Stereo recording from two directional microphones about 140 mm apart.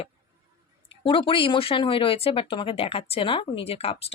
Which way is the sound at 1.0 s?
35° left (ahead or behind).